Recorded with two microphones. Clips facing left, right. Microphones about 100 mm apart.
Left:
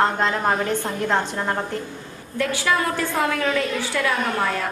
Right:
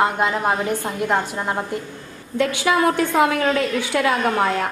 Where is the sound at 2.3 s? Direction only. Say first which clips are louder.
Right 3 dB; 20° right (ahead or behind).